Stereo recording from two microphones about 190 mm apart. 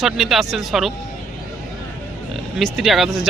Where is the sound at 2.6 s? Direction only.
Centre (ahead or behind).